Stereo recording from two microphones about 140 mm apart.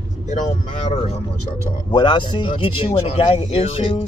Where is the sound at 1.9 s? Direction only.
35° left (ahead or behind).